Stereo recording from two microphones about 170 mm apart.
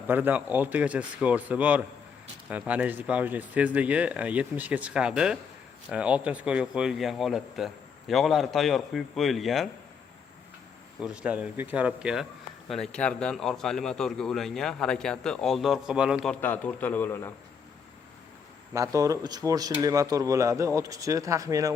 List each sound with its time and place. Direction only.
0.1 s a man's voice: 10° right (ahead or behind)
11.0 s a man's voice: 5° right (ahead or behind); by 17.3 s 10° left (ahead or behind)
18.7 s speech: 20° right (ahead or behind)